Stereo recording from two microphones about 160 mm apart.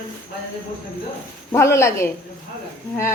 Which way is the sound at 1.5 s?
15° left (ahead or behind).